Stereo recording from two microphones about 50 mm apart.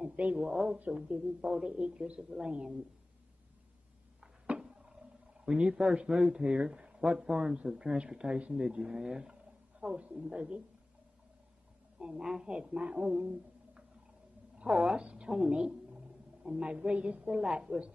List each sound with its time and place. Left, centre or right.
0.0 s a sound: right
0.4 s speech: centre
4.2 s a sound: centre
5.4 s speech: centre
12.0 s a woman's voice: centre
17.3 s speech: centre